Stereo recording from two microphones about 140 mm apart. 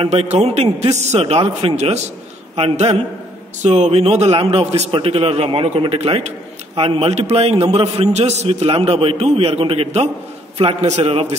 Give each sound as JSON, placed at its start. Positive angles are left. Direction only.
{"t": 0.0, "sound": "a man's voice", "side_deg": -50}